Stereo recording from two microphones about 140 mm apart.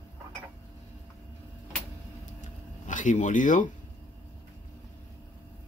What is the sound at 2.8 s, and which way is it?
Speech, 60° left (ahead or behind).